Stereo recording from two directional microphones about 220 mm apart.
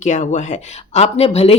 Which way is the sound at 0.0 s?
35° left (ahead or behind).